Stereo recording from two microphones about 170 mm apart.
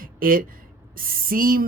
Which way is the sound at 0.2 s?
55° right (ahead or behind).